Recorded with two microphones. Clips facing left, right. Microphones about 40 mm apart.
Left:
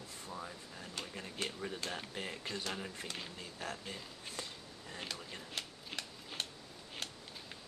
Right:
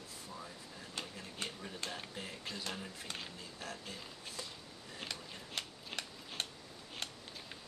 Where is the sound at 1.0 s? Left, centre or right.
Centre.